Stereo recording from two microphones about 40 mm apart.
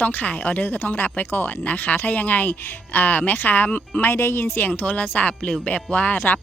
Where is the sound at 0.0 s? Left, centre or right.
Left.